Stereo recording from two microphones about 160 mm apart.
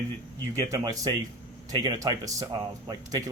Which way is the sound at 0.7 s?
20° right (ahead or behind).